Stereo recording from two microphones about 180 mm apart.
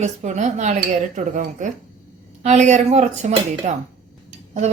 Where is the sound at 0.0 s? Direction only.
40° right (ahead or behind).